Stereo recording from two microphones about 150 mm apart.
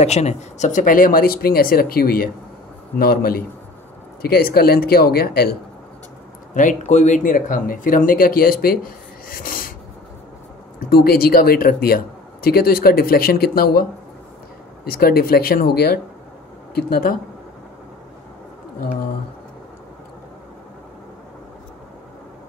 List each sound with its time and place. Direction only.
0.0 s a man's voice: 45° left (ahead or behind); by 5.6 s 90° left
6.5 s speech: 55° left (ahead or behind)
10.9 s speech: 90° left
14.9 s a man's voice: 90° left